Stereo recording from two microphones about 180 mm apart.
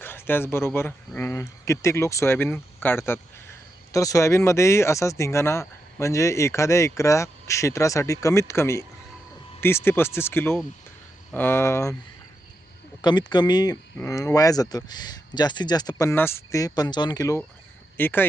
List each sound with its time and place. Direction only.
0.0 s speech: 10° left (ahead or behind)
13.0 s speech: 25° left (ahead or behind)